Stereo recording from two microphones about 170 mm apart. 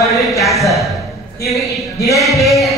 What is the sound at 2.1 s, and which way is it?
Speech, centre (ahead or behind).